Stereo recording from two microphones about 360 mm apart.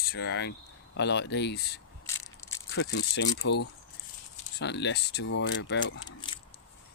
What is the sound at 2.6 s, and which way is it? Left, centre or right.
Speech, left.